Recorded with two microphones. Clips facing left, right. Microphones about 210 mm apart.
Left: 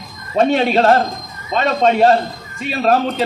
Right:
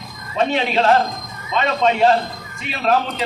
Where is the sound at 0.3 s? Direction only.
40° left (ahead or behind).